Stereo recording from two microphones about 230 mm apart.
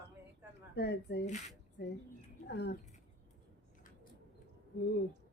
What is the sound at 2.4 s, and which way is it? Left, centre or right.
Speech, left.